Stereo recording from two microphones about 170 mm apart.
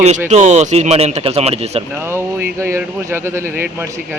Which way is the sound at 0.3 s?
45° right (ahead or behind).